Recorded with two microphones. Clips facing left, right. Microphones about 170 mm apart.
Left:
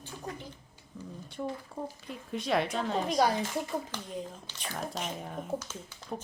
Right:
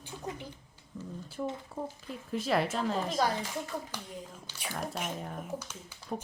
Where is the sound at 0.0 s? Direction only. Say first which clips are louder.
Right 1 dB; 15° right (ahead or behind).